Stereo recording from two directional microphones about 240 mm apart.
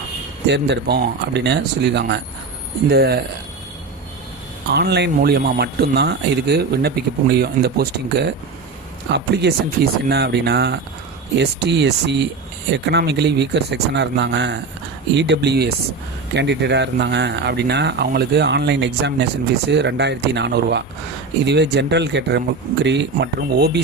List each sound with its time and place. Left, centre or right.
0.4 s speech: right
4.7 s speech: right